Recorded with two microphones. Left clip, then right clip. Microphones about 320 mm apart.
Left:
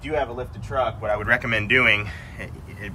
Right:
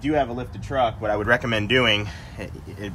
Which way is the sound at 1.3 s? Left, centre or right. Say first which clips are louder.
Left 1 dB; centre.